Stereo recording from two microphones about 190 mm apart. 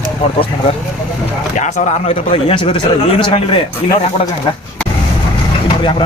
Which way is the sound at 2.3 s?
30° left (ahead or behind).